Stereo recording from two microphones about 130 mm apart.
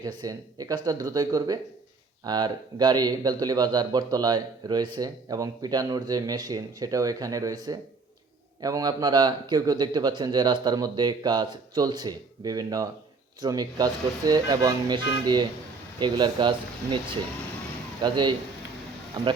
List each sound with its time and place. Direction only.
0.2 s speech: 30° right (ahead or behind)